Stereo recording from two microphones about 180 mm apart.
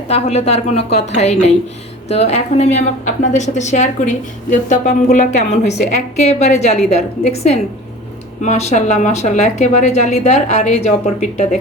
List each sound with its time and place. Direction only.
0.1 s a woman's voice: 35° left (ahead or behind)